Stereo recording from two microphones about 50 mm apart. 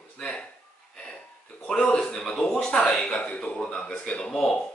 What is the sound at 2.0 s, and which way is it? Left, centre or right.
Speech, centre.